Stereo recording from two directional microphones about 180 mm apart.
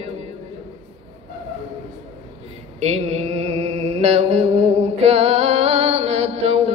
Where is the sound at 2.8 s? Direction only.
35° right (ahead or behind).